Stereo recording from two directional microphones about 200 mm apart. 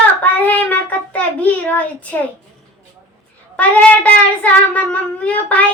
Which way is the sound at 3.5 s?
5° left (ahead or behind).